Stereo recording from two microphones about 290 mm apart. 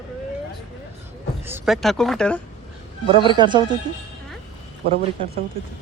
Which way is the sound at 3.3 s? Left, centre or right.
Centre.